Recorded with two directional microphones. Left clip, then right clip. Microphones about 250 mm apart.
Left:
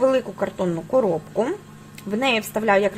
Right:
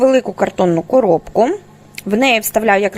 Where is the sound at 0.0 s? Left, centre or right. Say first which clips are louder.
Right 7 dB; right.